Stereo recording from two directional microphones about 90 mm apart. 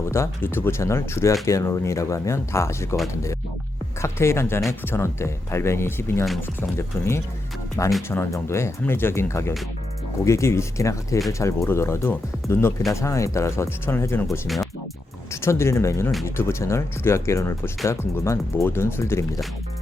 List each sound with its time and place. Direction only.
0.0 s speech: 30° left (ahead or behind)
4.0 s speech: 30° left (ahead or behind)